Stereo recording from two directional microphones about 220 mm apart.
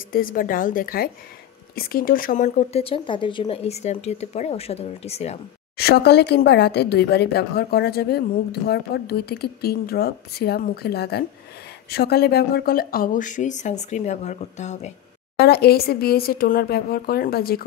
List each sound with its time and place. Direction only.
0.1 s speech: 40° left (ahead or behind)
5.8 s a woman's voice: 45° left (ahead or behind); by 14.9 s 30° left (ahead or behind)
15.3 s a woman's voice: 45° left (ahead or behind)